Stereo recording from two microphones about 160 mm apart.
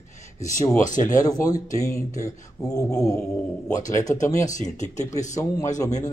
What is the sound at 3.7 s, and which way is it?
Speech, 55° left (ahead or behind).